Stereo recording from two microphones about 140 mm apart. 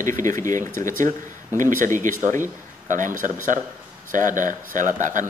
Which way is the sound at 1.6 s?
70° right (ahead or behind).